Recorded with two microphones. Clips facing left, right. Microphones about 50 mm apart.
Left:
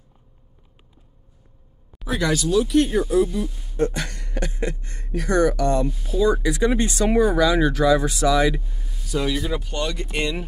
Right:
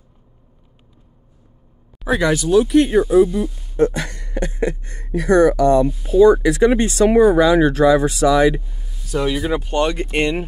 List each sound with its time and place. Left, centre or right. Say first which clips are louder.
2.0 s speech: right 5 dB; right
3.3 s speech: right 5 dB; centre
3.7 s speech: right 6 dB; right
7.1 s speech: right 7 dB; centre
7.3 s speech: right 5 dB; right
8.5 s a sound: right 3 dB; centre
9.0 s a sound: right 4 dB; right
9.3 s speech: right 6 dB; right